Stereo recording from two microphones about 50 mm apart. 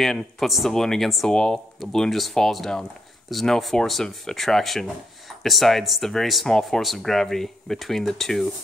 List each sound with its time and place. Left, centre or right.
0.0 s speech: centre
1.3 s speech: centre